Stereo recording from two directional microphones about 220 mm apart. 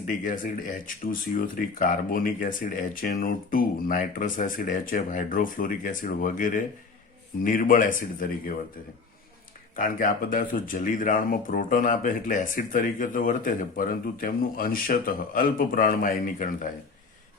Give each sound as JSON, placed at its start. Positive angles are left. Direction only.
{"t": 0.3, "sound": "speech", "side_deg": 40}
{"t": 9.7, "sound": "speech", "side_deg": 40}